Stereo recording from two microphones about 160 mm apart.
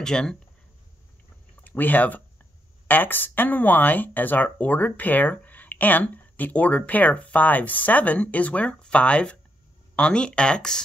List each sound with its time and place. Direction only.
0.0 s speech: 5° left (ahead or behind)
1.6 s speech: 10° left (ahead or behind)